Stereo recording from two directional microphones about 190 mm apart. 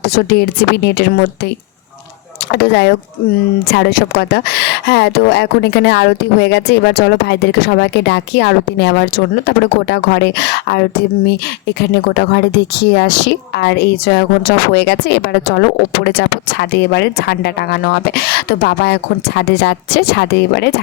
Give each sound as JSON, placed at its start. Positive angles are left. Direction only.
{"t": 0.0, "sound": "speech", "side_deg": 60}
{"t": 2.5, "sound": "speech", "side_deg": 60}